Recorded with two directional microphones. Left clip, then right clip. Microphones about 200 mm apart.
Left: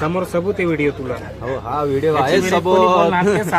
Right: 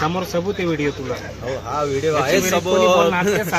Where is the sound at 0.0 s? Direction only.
10° right (ahead or behind).